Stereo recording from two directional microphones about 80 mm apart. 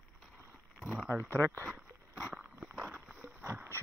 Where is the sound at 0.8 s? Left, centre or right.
Centre.